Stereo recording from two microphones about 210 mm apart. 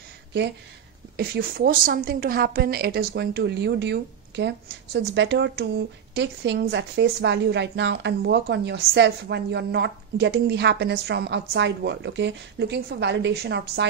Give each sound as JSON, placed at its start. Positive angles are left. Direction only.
{"t": 1.1, "sound": "a woman's voice", "side_deg": -45}